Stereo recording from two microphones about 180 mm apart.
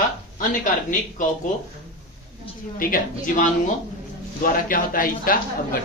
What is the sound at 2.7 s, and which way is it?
A man's voice, 50° left (ahead or behind).